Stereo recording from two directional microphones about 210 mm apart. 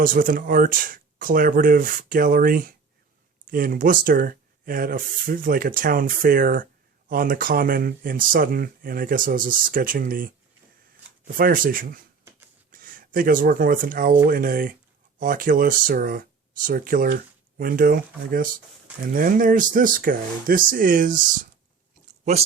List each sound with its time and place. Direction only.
0.0 s speech: 40° right (ahead or behind)